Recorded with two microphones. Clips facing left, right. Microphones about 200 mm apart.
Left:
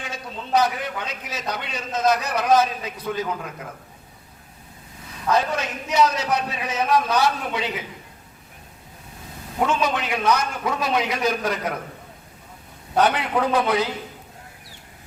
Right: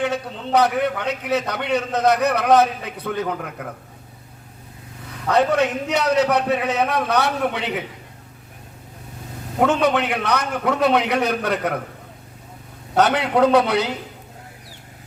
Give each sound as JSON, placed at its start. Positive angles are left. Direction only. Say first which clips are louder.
{"t": 0.0, "sound": "a man's voice", "louder": "right 10 dB", "side_deg": -65}
{"t": 5.3, "sound": "a man's voice", "louder": "right 5 dB", "side_deg": -65}
{"t": 9.6, "sound": "a man's voice", "louder": "right 5 dB", "side_deg": -65}
{"t": 13.0, "sound": "a man's voice", "louder": "right 4 dB", "side_deg": -70}